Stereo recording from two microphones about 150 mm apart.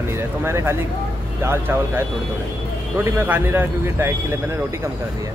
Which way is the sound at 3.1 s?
15° right (ahead or behind).